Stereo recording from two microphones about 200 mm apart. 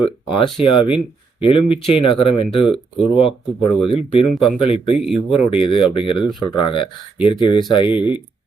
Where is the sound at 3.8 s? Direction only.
25° left (ahead or behind).